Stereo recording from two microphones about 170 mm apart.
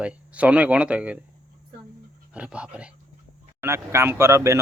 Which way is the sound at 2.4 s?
5° right (ahead or behind).